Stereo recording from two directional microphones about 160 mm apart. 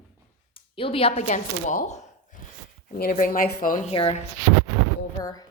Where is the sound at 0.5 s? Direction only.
35° left (ahead or behind).